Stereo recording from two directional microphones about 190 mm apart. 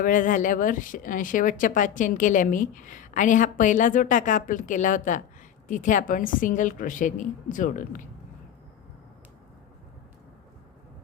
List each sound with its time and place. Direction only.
0.0 s a woman's voice: 45° left (ahead or behind)